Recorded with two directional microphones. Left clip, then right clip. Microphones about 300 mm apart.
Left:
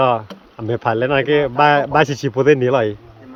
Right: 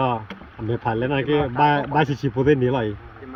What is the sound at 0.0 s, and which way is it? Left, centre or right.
Speech, centre.